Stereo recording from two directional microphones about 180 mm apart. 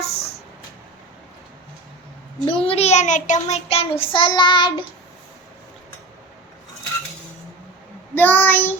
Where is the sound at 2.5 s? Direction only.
30° left (ahead or behind).